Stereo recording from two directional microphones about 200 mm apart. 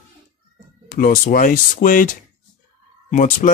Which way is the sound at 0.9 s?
45° left (ahead or behind).